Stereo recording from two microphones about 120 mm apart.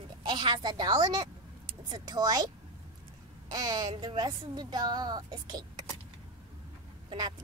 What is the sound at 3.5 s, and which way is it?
A woman's voice, 35° right (ahead or behind).